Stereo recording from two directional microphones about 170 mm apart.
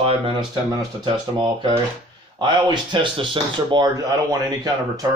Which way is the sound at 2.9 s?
30° right (ahead or behind).